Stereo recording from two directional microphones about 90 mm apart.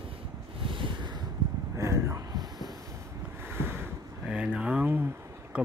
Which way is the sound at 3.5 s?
25° right (ahead or behind).